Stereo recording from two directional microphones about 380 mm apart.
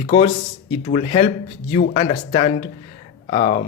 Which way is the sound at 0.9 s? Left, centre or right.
Centre.